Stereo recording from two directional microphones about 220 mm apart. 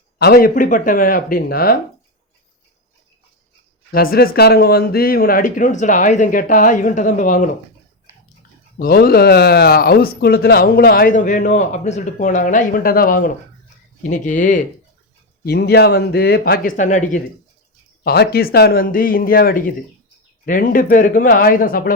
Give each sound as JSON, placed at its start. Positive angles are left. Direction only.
{"t": 0.2, "sound": "speech", "side_deg": 45}
{"t": 3.9, "sound": "speech", "side_deg": 45}
{"t": 8.8, "sound": "speech", "side_deg": 45}
{"t": 15.4, "sound": "speech", "side_deg": 45}